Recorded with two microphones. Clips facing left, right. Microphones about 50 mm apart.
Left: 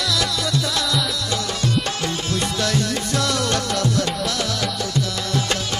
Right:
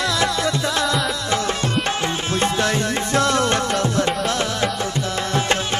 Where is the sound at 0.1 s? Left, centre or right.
Right.